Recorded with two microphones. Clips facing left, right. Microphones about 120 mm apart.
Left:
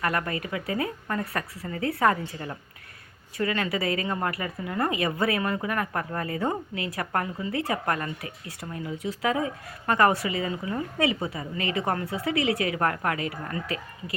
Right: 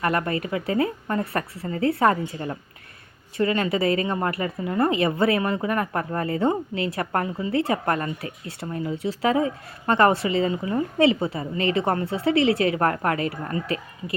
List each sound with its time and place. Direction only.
0.0 s speech: 30° right (ahead or behind)
3.3 s speech: 25° right (ahead or behind)